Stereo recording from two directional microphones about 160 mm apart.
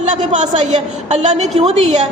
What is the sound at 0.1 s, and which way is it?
A woman's voice, 50° right (ahead or behind).